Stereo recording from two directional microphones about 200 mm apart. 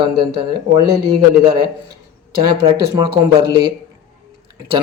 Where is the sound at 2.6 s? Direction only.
25° right (ahead or behind).